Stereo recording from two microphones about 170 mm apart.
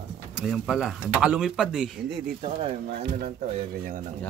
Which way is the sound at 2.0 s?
75° right (ahead or behind).